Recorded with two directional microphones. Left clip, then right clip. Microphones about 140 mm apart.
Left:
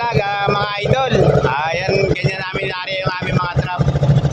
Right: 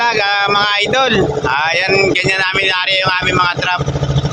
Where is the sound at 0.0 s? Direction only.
10° left (ahead or behind).